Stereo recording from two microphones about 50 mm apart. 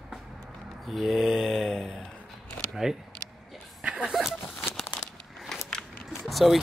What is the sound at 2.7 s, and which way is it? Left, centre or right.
Speech, centre.